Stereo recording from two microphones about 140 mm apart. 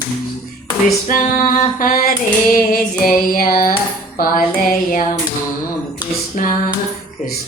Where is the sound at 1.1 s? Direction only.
70° left (ahead or behind); by 3.7 s 90° left.